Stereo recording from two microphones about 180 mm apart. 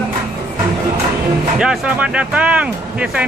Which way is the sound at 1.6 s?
5° right (ahead or behind).